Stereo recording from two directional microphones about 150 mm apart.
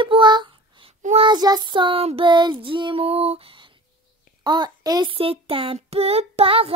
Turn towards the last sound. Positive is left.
turn(degrees=-40)  # may be behind; listen again after turning